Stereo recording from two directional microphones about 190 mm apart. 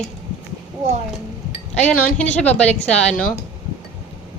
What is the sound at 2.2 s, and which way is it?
Speech, 5° left (ahead or behind).